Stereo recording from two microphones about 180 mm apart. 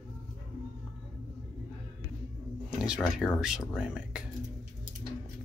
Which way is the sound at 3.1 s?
5° right (ahead or behind).